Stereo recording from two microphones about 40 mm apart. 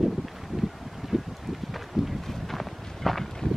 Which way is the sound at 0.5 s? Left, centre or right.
Centre.